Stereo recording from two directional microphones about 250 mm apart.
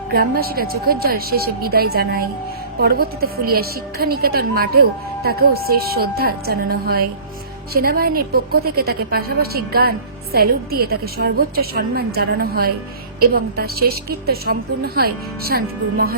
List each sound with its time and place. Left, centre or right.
0.1 s a woman's voice: right